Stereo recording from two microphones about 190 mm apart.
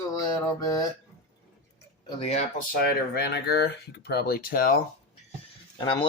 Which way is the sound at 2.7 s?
55° left (ahead or behind).